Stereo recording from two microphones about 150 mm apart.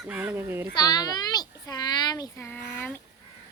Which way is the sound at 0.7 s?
25° left (ahead or behind).